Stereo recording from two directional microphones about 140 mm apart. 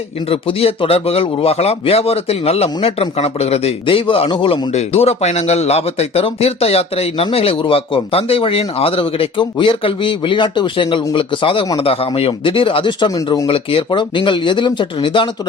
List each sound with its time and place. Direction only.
0.3 s a man's voice: 40° left (ahead or behind); by 13.5 s 25° left (ahead or behind)
13.5 s speech: 40° left (ahead or behind)